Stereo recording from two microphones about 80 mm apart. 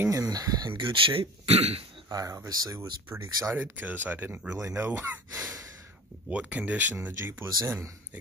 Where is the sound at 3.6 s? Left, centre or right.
Right.